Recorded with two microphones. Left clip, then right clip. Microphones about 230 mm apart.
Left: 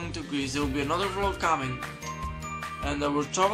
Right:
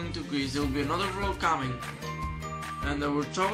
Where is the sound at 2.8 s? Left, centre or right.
Centre.